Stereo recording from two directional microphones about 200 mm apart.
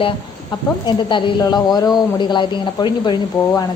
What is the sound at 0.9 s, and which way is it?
A woman's voice, 20° left (ahead or behind).